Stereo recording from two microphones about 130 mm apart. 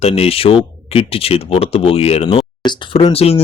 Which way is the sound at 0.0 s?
50° left (ahead or behind).